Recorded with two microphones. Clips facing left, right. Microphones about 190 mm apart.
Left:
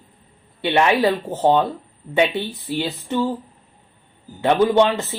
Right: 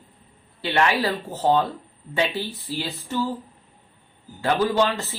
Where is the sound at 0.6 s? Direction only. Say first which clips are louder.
Left 5 dB; 25° left (ahead or behind).